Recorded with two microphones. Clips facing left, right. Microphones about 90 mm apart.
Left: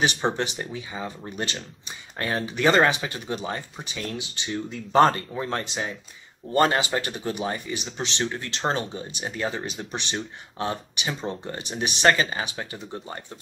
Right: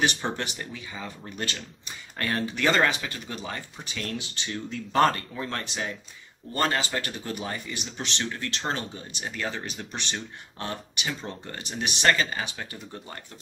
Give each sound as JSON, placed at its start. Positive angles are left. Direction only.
{"t": 0.2, "sound": "speech", "side_deg": 25}